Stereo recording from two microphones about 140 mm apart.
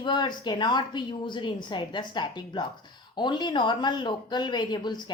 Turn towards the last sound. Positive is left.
turn(degrees=30)  # may be behind; listen again after turning